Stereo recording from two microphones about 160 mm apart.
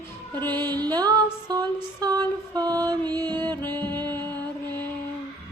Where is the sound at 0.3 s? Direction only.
10° left (ahead or behind).